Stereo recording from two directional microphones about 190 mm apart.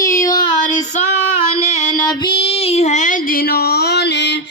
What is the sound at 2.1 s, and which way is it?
Child singing, 25° left (ahead or behind).